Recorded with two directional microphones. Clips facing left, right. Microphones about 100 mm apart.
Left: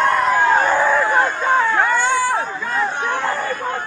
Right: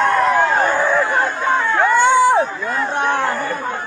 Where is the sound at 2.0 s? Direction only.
25° right (ahead or behind).